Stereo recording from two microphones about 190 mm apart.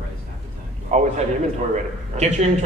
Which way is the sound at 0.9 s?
40° right (ahead or behind).